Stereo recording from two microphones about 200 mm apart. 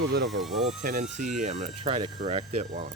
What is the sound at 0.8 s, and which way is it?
Speech, 40° right (ahead or behind).